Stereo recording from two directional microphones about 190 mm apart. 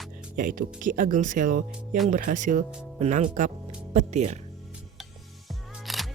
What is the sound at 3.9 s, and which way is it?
Music, 35° right (ahead or behind).